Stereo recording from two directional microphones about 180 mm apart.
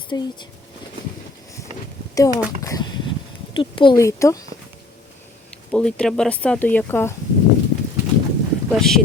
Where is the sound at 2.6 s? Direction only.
20° left (ahead or behind).